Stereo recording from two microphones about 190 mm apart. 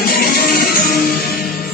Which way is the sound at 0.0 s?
50° left (ahead or behind).